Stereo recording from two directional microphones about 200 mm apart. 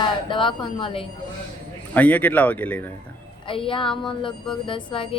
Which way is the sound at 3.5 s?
25° left (ahead or behind).